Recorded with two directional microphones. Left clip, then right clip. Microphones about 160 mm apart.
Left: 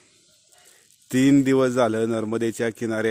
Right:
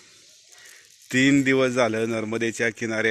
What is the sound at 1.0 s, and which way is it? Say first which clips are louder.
A man's voice: left 1 dB; 30° left (ahead or behind).